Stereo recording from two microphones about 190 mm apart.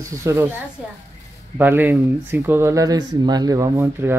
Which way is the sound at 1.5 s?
10° right (ahead or behind).